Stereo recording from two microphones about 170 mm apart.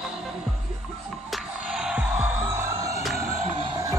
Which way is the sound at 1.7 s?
5° right (ahead or behind).